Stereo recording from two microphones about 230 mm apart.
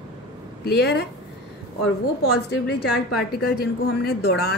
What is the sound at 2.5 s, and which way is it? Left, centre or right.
A woman's voice, left.